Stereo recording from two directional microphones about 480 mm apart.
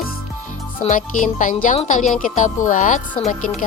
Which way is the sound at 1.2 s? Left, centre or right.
Centre.